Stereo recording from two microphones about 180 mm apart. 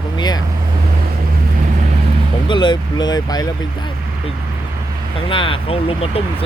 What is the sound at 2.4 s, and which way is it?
Speech, 25° left (ahead or behind).